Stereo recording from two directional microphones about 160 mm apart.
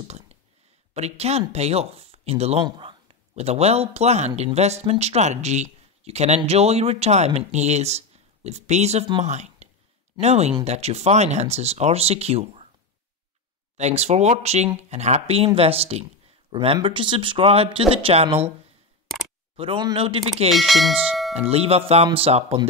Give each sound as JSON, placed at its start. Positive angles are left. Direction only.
{"t": 0.9, "sound": "speech", "side_deg": -40}
{"t": 13.7, "sound": "speech", "side_deg": -45}
{"t": 19.5, "sound": "speech", "side_deg": -35}
{"t": 20.5, "sound": "speech", "side_deg": 0}
{"t": 21.3, "sound": "speech", "side_deg": -40}